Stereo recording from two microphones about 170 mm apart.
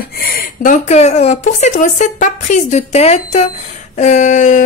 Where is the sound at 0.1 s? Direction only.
60° left (ahead or behind).